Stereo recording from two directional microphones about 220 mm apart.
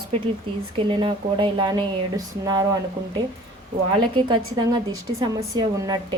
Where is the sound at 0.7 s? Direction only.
20° right (ahead or behind).